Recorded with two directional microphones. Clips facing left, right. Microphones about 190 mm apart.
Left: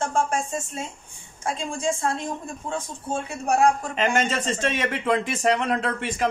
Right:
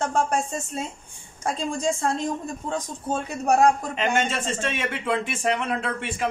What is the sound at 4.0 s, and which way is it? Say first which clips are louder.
Speech: left 1 dB; 40° left (ahead or behind).